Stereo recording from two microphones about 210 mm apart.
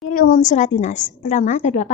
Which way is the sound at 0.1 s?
40° left (ahead or behind).